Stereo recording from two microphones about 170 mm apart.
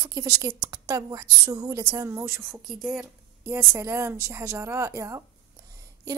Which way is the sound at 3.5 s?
15° right (ahead or behind).